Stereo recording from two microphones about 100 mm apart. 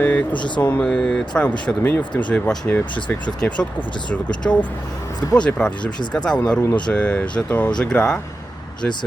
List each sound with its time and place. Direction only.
0.0 s speech: 15° left (ahead or behind)
0.3 s speech: 50° left (ahead or behind)
0.6 s speech: 15° left (ahead or behind)
0.9 s speech: 5° left (ahead or behind)